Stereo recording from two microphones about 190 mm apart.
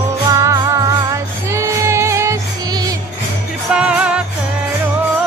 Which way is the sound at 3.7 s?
5° right (ahead or behind).